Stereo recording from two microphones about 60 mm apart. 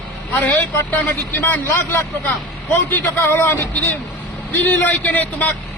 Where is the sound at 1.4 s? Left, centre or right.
Left.